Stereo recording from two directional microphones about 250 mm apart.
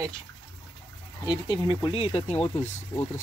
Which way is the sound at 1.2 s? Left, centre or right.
Centre.